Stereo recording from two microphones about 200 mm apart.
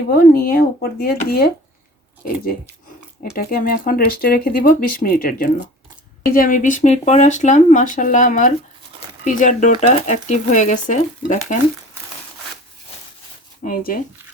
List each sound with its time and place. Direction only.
0.1 s speech: 45° left (ahead or behind)
13.6 s speech: 45° left (ahead or behind)